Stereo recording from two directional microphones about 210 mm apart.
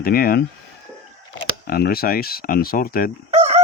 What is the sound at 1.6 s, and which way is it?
Speech, 45° left (ahead or behind).